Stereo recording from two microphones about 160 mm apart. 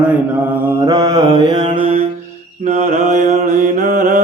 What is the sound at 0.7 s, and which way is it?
Mantra, 20° right (ahead or behind).